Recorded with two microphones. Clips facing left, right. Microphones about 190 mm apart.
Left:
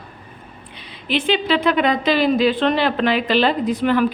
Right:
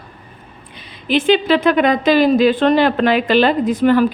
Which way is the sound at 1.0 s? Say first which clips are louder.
Right 5 dB; 45° right (ahead or behind).